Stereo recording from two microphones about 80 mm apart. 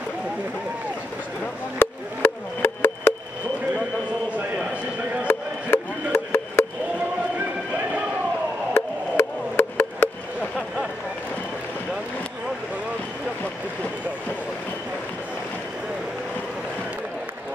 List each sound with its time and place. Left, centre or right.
1.8 s wood block: left
5.2 s music: left
8.7 s wood block: left